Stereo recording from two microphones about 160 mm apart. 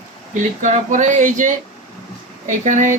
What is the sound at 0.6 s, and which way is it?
Speech, 50° right (ahead or behind).